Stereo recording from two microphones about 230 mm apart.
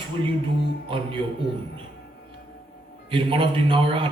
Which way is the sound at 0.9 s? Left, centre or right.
Right.